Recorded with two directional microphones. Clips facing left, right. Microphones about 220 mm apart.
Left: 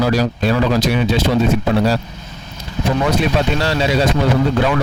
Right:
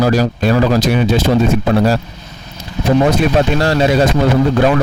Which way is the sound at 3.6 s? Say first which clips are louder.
Right 4 dB; 50° right (ahead or behind).